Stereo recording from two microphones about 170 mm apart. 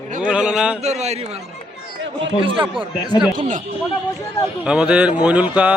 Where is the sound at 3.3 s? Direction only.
50° right (ahead or behind).